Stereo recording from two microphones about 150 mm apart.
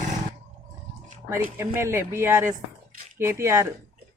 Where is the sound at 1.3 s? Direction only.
15° right (ahead or behind).